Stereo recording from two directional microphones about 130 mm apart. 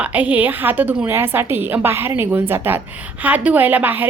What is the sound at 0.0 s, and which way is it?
A woman's voice, 10° right (ahead or behind).